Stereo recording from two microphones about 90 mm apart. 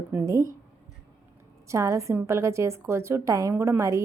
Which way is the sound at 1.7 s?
35° right (ahead or behind).